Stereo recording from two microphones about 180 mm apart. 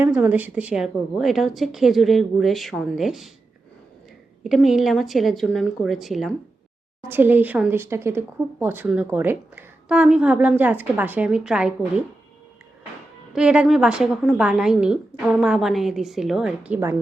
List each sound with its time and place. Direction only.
0.0 s a woman's voice: 10° right (ahead or behind)
4.4 s a woman's voice: centre (ahead or behind)
13.3 s a woman's voice: 5° right (ahead or behind)